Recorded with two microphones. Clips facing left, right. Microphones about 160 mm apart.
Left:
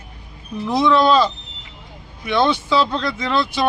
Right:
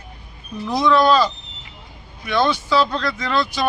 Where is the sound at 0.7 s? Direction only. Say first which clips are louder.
Left 1 dB; 25° left (ahead or behind).